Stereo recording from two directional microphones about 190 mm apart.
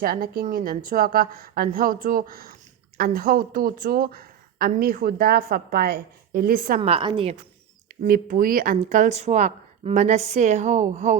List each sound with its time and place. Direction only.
0.0 s a woman's voice: 50° right (ahead or behind)
6.8 s speech: 30° right (ahead or behind)
8.0 s speech: 50° right (ahead or behind)